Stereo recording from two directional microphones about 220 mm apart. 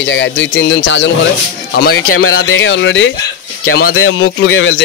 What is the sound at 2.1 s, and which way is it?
Speech, 70° left (ahead or behind).